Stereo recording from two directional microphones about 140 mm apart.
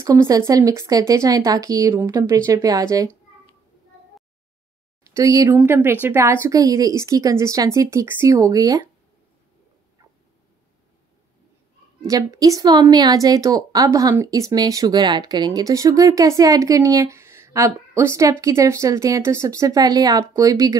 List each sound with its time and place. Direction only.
0.0 s speech: 25° right (ahead or behind)
5.0 s speech: 25° right (ahead or behind)
12.1 s speech: 25° right (ahead or behind)